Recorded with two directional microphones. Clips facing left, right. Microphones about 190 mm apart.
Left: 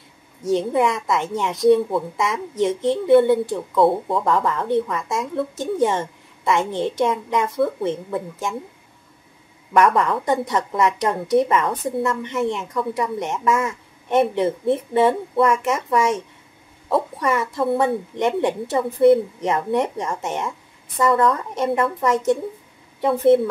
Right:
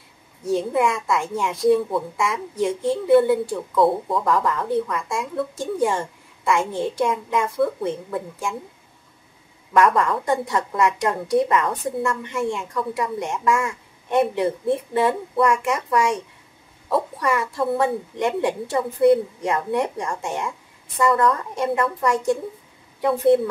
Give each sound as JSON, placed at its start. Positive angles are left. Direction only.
{"t": 0.5, "sound": "a woman's voice", "side_deg": 20}
{"t": 9.9, "sound": "a woman's voice", "side_deg": 20}
{"t": 17.2, "sound": "a woman's voice", "side_deg": 20}